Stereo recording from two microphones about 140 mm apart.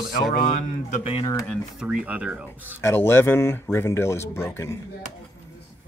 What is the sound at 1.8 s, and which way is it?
Speech, 5° right (ahead or behind).